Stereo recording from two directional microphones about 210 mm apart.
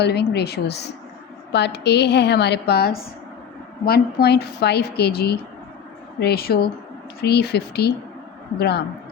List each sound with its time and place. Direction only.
0.0 s a woman's voice: 50° left (ahead or behind)